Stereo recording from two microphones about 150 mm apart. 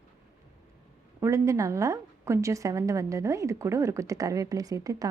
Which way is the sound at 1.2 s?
20° right (ahead or behind).